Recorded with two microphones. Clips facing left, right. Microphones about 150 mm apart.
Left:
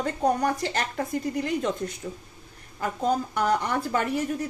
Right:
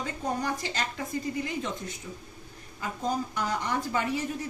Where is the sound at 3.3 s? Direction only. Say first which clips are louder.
Left 5 dB; 60° left (ahead or behind).